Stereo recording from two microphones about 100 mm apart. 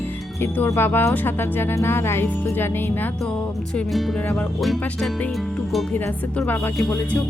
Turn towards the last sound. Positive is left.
turn(degrees=20)  # may be behind; listen again after turning